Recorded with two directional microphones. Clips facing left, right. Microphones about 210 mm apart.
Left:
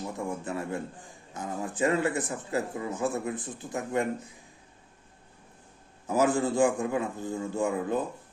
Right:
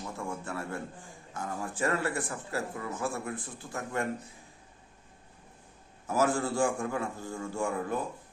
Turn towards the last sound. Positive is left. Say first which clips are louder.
# left 4 dB
turn(degrees=20)  # may be behind; listen again after turning